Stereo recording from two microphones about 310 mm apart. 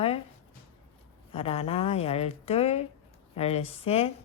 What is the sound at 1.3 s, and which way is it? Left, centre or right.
Speech, centre.